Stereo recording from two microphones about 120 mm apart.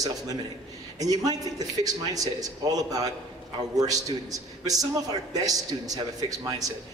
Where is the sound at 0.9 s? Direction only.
30° right (ahead or behind).